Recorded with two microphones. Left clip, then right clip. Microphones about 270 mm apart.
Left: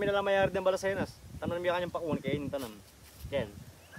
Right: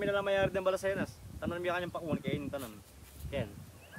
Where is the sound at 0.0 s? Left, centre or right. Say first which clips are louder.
Left 3 dB; left.